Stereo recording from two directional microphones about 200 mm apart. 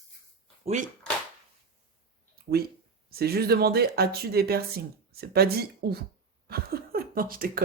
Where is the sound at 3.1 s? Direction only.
50° right (ahead or behind).